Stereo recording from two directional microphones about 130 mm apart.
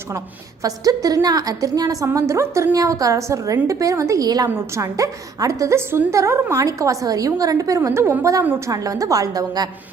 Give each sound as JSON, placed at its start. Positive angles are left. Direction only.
{"t": 0.6, "sound": "a woman's voice", "side_deg": -30}